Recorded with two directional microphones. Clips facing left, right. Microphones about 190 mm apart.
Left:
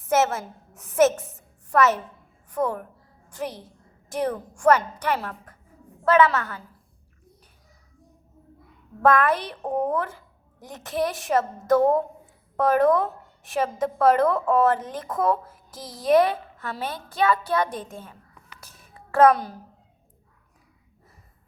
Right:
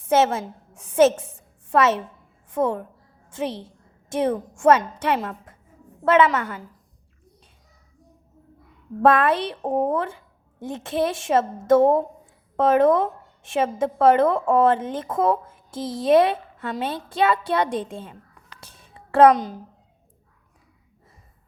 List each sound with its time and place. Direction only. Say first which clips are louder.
0.0 s a woman's voice: right 3 dB; 30° right (ahead or behind)
9.0 s a woman's voice: right 2 dB; 30° right (ahead or behind)
18.6 s a sound: right 1 dB; 30° right (ahead or behind)